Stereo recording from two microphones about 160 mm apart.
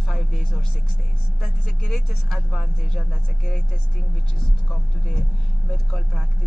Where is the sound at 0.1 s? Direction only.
Centre (ahead or behind).